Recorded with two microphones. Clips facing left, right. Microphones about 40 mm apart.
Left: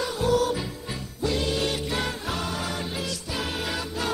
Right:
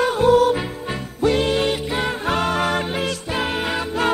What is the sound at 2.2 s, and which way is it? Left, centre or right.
Music, right.